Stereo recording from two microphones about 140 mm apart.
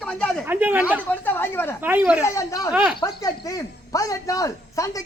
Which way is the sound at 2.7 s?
5° right (ahead or behind).